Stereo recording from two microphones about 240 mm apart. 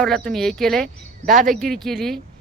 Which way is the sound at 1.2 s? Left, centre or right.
Right.